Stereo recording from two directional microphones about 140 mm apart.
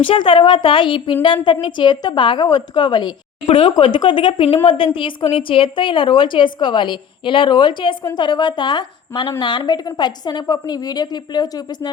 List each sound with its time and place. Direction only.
0.1 s a woman's voice: 40° left (ahead or behind)